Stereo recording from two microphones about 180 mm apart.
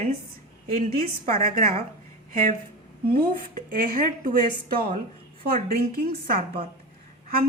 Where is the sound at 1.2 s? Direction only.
50° right (ahead or behind).